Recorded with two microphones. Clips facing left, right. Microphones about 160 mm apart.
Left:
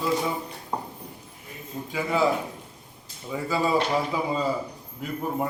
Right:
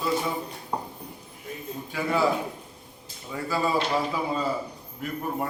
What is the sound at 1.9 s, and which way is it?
Speech, 15° left (ahead or behind).